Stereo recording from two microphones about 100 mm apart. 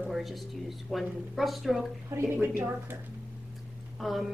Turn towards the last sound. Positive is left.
turn(degrees=0)  # may be behind; listen again after turning